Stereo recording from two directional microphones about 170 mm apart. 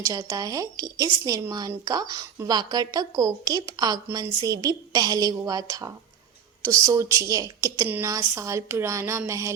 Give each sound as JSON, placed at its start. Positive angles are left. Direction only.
{"t": 0.0, "sound": "a woman's voice", "side_deg": -20}